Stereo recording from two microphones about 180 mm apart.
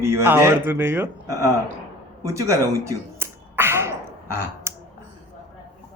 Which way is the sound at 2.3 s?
15° right (ahead or behind).